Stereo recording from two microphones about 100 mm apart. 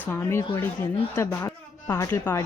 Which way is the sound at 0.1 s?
25° left (ahead or behind).